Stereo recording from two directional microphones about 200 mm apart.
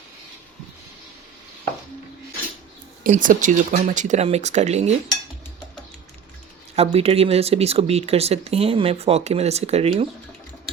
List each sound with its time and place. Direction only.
3.0 s speech: 40° right (ahead or behind)
6.7 s speech: 30° right (ahead or behind)